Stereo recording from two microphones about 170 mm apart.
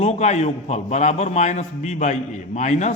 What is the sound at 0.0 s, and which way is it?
A man's voice, 40° left (ahead or behind).